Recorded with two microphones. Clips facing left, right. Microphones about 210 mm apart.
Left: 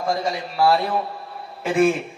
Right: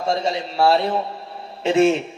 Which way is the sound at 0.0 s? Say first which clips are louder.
Right 2 dB; 25° right (ahead or behind).